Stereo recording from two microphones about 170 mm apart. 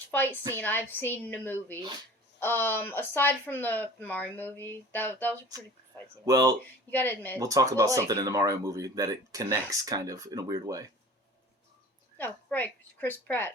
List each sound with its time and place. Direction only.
0.1 s a woman's voice: 10° left (ahead or behind)
6.2 s speech: 20° right (ahead or behind)
6.9 s speech: 10° left (ahead or behind)
7.3 s speech: 20° right (ahead or behind)
12.1 s a woman's voice: 10° left (ahead or behind)